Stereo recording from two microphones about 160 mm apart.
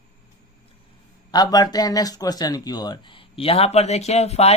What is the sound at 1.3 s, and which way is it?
Speech, 25° left (ahead or behind).